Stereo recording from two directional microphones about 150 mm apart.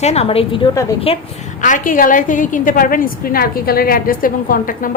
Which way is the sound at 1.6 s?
60° left (ahead or behind).